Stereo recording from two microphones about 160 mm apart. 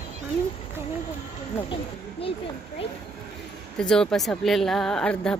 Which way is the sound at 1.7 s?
35° left (ahead or behind).